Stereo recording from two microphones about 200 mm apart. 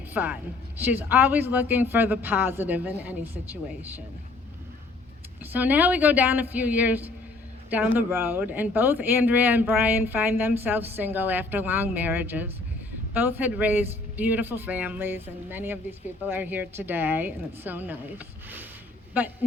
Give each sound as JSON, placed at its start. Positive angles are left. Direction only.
{"t": 0.1, "sound": "a woman's voice", "side_deg": -10}
{"t": 5.4, "sound": "a man's voice", "side_deg": -10}